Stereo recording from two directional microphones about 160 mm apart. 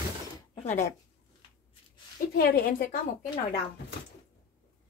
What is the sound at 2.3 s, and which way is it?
Speech, 70° left (ahead or behind).